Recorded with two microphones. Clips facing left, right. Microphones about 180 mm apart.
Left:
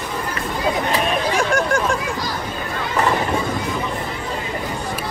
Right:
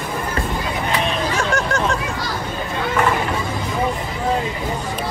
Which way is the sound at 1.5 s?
10° left (ahead or behind).